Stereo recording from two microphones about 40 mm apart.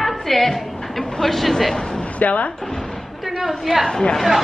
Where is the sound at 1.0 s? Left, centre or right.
Centre.